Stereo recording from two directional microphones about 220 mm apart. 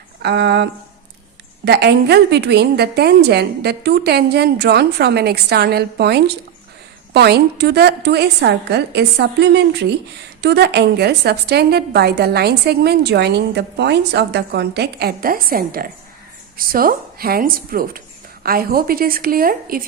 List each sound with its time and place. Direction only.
0.2 s a woman's voice: 50° right (ahead or behind)